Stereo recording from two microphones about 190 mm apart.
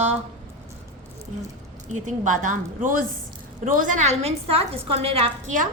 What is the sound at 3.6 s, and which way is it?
A woman's voice, 45° right (ahead or behind).